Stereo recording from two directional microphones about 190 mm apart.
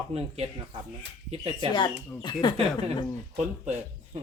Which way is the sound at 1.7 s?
25° left (ahead or behind).